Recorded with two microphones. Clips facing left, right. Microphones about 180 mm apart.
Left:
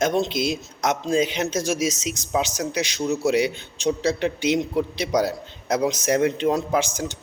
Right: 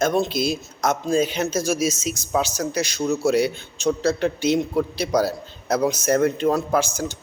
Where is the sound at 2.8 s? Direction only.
45° right (ahead or behind).